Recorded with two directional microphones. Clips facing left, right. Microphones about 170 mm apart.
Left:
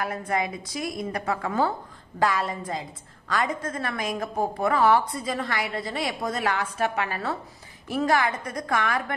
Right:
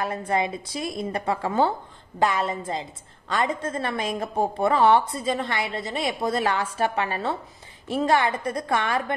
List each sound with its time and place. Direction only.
0.0 s a woman's voice: 30° right (ahead or behind)